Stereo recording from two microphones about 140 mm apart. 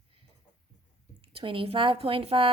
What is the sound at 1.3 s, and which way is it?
A woman's voice, 40° right (ahead or behind).